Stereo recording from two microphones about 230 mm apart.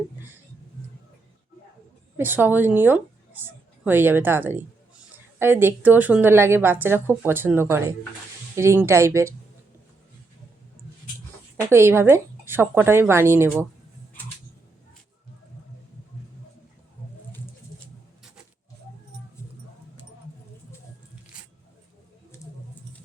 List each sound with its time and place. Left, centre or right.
2.1 s a woman's voice: centre
11.7 s a woman's voice: centre